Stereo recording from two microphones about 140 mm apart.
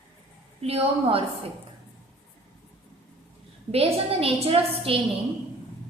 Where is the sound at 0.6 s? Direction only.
45° right (ahead or behind).